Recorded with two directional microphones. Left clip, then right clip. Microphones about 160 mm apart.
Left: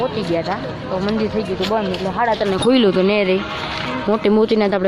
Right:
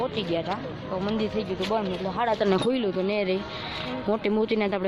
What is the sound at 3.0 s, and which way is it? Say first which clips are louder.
Speech: left 10 dB; 5° left (ahead or behind).